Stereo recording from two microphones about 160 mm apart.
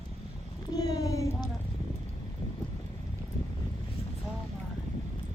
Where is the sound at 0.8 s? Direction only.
25° left (ahead or behind).